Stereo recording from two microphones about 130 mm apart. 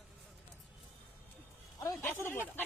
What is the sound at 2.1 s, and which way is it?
Speech, 20° left (ahead or behind).